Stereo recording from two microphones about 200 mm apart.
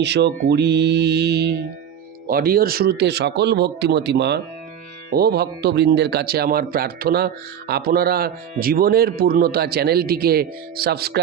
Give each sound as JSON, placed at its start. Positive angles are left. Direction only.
{"t": 0.0, "sound": "a man's voice", "side_deg": -60}